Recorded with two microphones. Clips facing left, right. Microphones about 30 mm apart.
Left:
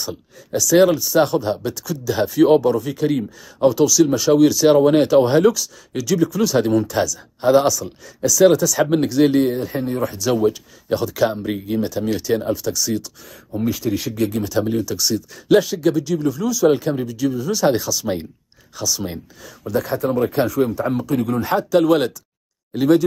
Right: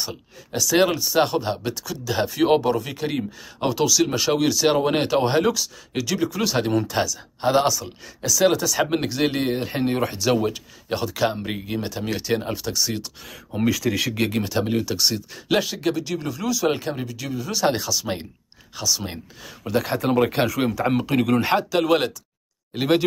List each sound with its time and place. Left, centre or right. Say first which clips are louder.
0.1 s speech: left 6 dB; right
2.5 s speech: left 4 dB; centre
4.4 s speech: left 8 dB; centre
9.6 s speech: left 1 dB; right
10.1 s speech: left 3 dB; centre
13.3 s speech: even; right
14.3 s speech: left 3 dB; right
15.4 s speech: left 7 dB; centre
19.6 s speech: left 2 dB; right
21.6 s speech: left 4 dB; centre